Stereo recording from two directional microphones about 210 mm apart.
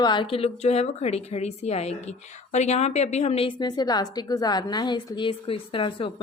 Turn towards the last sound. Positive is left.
turn(degrees=25)  # may be behind; listen again after turning